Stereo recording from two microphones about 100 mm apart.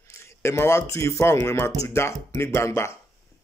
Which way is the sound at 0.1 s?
25° left (ahead or behind).